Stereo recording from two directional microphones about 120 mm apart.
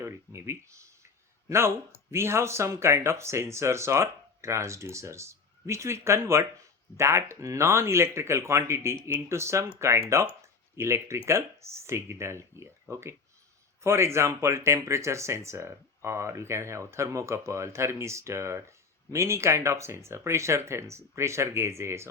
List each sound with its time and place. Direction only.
0.0 s speech: 25° right (ahead or behind)